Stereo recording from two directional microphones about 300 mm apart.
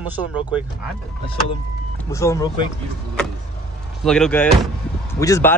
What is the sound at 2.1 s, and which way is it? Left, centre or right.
Speech, centre.